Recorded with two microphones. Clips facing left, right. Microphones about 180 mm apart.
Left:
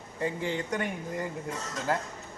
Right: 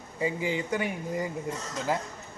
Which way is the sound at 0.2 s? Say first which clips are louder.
Right 2 dB; 5° right (ahead or behind).